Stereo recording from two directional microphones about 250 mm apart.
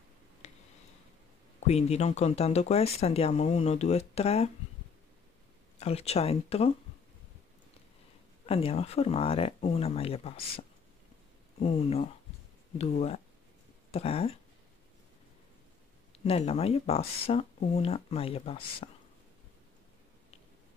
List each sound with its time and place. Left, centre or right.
0.4 s a sound: left
1.7 s speech: left
5.8 s speech: left
8.5 s speech: left
11.6 s speech: left
16.3 s speech: left